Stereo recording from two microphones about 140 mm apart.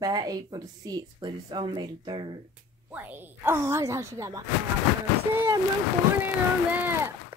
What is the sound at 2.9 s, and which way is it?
Speech, 15° right (ahead or behind).